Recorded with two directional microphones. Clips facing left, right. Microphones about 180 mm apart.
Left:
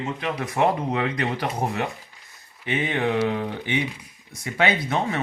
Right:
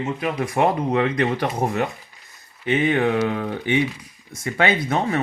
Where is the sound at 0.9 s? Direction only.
45° right (ahead or behind).